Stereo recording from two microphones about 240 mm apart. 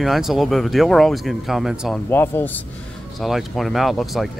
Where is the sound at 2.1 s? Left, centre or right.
Centre.